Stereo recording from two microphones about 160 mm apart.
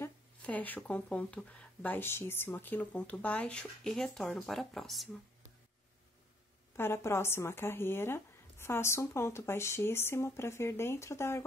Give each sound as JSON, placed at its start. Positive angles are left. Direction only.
{"t": 0.0, "sound": "a woman's voice", "side_deg": 10}
{"t": 6.8, "sound": "a woman's voice", "side_deg": 15}